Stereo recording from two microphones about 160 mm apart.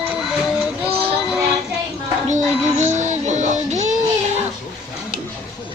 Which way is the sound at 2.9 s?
50° right (ahead or behind).